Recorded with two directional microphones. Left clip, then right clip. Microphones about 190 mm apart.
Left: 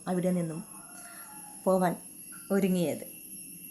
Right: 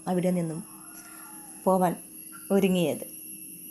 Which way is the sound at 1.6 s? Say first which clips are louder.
Right 3 dB; 10° right (ahead or behind).